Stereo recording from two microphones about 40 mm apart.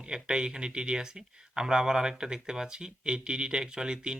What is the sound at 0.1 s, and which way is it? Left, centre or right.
Speech, centre.